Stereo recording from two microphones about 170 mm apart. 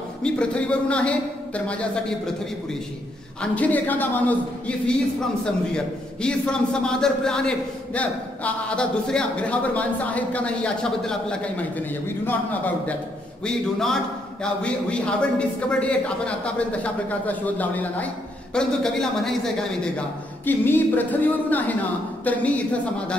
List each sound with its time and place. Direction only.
0.2 s a man's voice: 5° left (ahead or behind)
3.5 s a man's voice: 10° left (ahead or behind)